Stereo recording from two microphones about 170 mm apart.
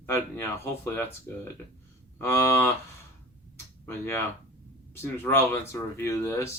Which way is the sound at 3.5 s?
15° left (ahead or behind).